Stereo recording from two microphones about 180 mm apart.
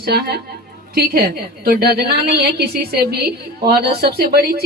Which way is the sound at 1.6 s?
55° right (ahead or behind).